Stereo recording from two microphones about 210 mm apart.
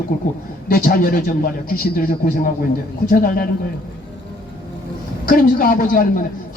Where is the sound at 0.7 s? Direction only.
45° left (ahead or behind).